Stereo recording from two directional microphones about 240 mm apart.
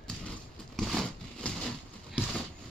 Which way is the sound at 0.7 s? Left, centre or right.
Centre.